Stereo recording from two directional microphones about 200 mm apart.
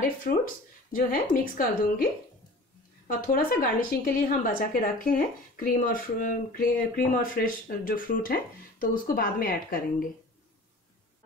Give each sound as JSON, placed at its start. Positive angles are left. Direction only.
{"t": 0.9, "sound": "a woman's voice", "side_deg": 45}
{"t": 3.1, "sound": "a woman's voice", "side_deg": 45}